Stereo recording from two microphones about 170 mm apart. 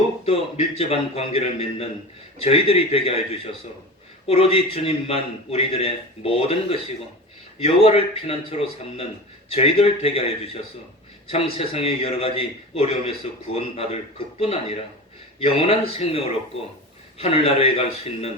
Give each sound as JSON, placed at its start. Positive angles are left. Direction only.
{"t": 0.3, "sound": "a man's voice", "side_deg": 35}
{"t": 4.3, "sound": "a man's voice", "side_deg": 35}